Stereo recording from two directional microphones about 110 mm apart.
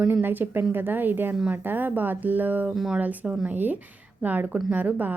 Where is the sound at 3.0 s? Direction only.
15° right (ahead or behind).